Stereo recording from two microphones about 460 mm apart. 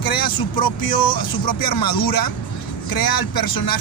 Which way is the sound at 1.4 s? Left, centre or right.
Left.